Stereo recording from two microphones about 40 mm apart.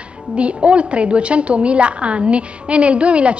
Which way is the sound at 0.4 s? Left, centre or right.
Right.